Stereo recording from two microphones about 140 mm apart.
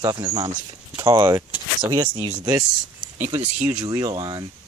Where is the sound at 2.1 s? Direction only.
45° right (ahead or behind).